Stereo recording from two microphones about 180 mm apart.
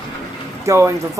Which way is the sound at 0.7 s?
15° right (ahead or behind).